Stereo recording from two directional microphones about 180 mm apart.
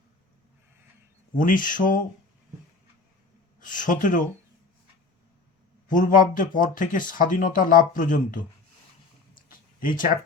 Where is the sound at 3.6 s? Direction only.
45° left (ahead or behind).